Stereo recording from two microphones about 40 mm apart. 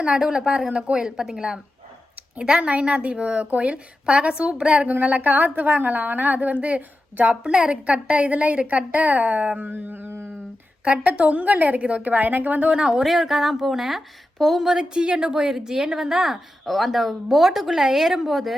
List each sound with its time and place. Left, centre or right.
0.2 s speech: centre
0.7 s a woman's voice: right
0.9 s a woman's voice: centre
4.9 s a woman's voice: right
7.5 s a woman's voice: right
10.8 s a woman's voice: right
12.7 s a woman's voice: right
13.1 s a woman's voice: centre
14.6 s speech: centre
16.6 s a woman's voice: centre